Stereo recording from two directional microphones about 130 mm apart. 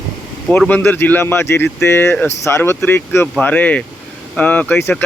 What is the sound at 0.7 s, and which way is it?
Speech, 15° left (ahead or behind).